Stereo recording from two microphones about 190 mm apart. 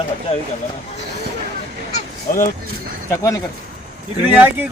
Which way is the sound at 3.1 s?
15° left (ahead or behind).